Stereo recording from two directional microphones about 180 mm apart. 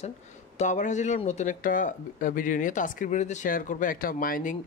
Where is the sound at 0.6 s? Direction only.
40° left (ahead or behind).